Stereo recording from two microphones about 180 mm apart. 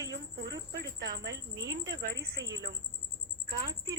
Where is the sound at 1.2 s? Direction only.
75° right (ahead or behind).